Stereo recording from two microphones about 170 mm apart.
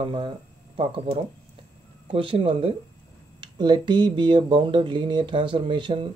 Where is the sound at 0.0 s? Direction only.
30° right (ahead or behind).